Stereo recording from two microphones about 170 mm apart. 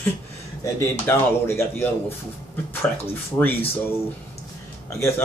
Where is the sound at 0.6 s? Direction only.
15° left (ahead or behind).